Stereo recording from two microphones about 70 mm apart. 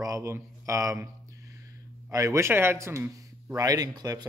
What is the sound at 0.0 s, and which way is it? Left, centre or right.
Speech, right.